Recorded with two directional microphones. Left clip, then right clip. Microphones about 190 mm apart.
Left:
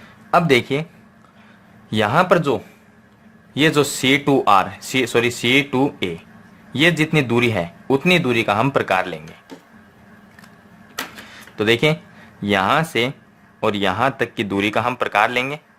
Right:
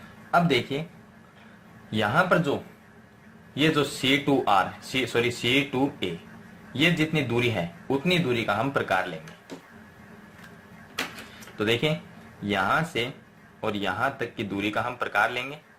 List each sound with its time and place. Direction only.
0.4 s speech: 40° left (ahead or behind)
1.9 s speech: 35° left (ahead or behind)
11.5 s speech: 35° left (ahead or behind)